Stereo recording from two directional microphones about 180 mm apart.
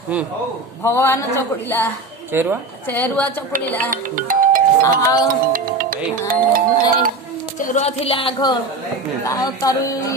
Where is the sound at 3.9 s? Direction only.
50° right (ahead or behind).